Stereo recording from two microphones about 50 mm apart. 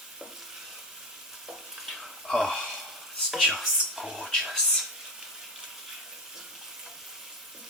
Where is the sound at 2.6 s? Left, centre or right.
Centre.